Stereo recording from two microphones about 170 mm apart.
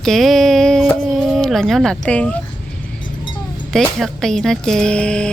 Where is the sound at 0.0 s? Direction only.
Centre (ahead or behind).